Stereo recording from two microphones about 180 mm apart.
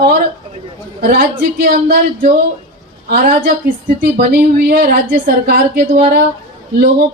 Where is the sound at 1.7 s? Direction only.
50° right (ahead or behind).